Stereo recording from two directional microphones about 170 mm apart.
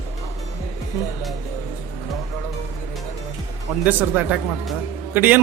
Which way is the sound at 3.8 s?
10° right (ahead or behind).